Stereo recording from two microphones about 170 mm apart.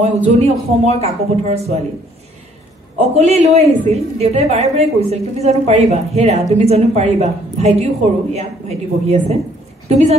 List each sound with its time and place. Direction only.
0.0 s a woman's voice: 40° right (ahead or behind)
3.0 s a woman's voice: 40° right (ahead or behind)